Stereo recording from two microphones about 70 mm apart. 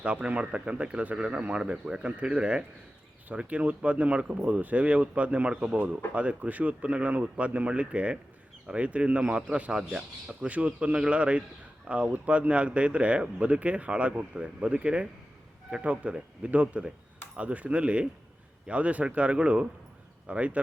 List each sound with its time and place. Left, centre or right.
0.0 s speech: centre